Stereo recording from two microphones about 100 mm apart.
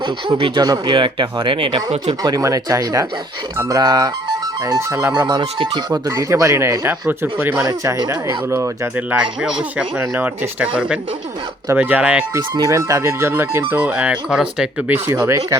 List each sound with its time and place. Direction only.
0.0 s speech: 55° right (ahead or behind)
0.6 s speech: 40° right (ahead or behind)
0.9 s speech: 55° right (ahead or behind)
2.2 s speech: 40° right (ahead or behind)
5.1 s speech: 50° right (ahead or behind)
6.1 s speech: 35° right (ahead or behind)
7.6 s speech: 35° right (ahead or behind)
9.0 s speech: 15° right (ahead or behind)
12.4 s speech: 45° right (ahead or behind)
12.7 s speech: 30° right (ahead or behind); by 14.9 s 10° right (ahead or behind)
14.9 s speech: 20° right (ahead or behind)